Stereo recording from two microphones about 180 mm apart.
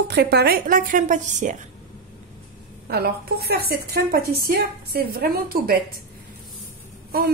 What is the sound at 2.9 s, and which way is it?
A woman's voice, 60° right (ahead or behind).